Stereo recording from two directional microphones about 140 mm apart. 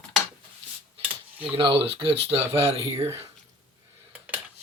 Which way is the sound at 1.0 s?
10° right (ahead or behind).